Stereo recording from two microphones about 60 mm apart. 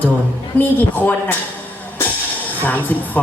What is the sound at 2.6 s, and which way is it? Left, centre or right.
Speech, left.